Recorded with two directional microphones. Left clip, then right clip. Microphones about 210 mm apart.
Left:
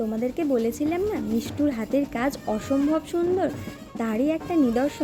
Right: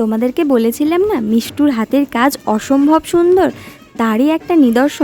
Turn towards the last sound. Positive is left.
turn(degrees=-45)  # may be behind; listen again after turning